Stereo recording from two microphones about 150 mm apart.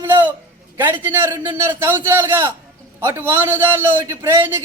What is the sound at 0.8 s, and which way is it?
A man's voice, 15° right (ahead or behind).